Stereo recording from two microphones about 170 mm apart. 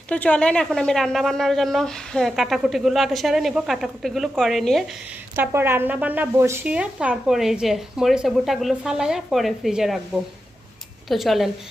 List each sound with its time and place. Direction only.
0.1 s a woman's voice: 10° left (ahead or behind)
5.4 s a woman's voice: 15° right (ahead or behind)
11.1 s a woman's voice: centre (ahead or behind)